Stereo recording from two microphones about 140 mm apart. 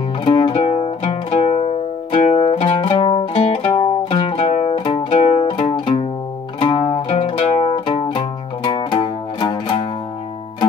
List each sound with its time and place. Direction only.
0.2 s music: 40° left (ahead or behind)
0.6 s music: 50° left (ahead or behind)
4.7 s music: 35° left (ahead or behind)
5.2 s music: 50° left (ahead or behind)